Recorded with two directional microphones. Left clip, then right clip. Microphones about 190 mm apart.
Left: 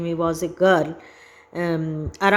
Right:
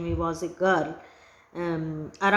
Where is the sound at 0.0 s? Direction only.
40° left (ahead or behind).